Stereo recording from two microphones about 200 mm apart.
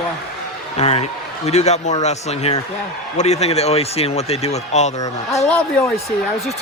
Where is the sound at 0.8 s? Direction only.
30° left (ahead or behind).